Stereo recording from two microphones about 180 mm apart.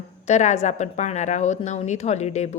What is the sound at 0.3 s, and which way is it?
Speech, 40° left (ahead or behind).